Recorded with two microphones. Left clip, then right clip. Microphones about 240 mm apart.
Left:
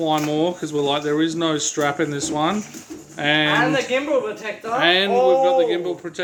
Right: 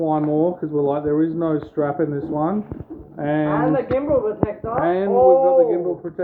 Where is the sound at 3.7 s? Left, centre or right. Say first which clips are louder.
Right 1 dB; centre.